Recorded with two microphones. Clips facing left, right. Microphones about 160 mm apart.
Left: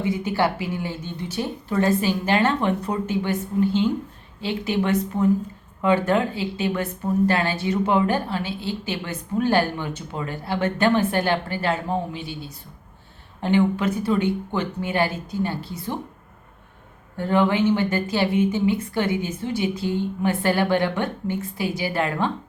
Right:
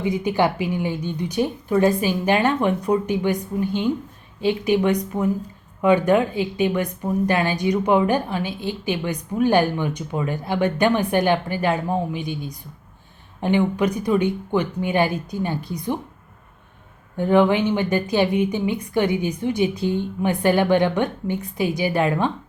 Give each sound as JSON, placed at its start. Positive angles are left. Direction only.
{"t": 0.0, "sound": "a woman's voice", "side_deg": -15}
{"t": 17.2, "sound": "a woman's voice", "side_deg": -15}